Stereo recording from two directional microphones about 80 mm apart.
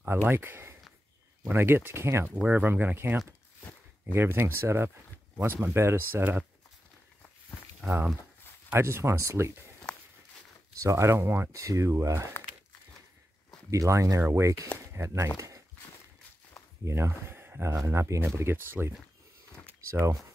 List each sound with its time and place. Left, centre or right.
0.0 s speech: right
2.4 s speech: right
8.7 s speech: right
10.8 s speech: right
13.7 s speech: right
16.8 s speech: right
19.6 s a sound: right